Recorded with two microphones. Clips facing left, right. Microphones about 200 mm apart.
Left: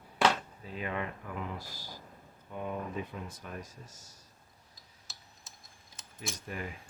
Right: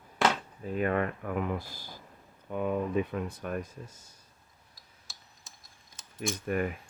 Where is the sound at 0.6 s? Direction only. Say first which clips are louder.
Right 12 dB; 50° right (ahead or behind).